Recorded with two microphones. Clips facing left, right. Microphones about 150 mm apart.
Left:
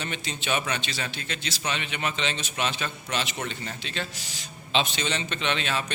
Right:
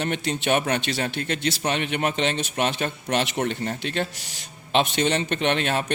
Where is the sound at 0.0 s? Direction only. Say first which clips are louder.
Right 8 dB; 60° right (ahead or behind).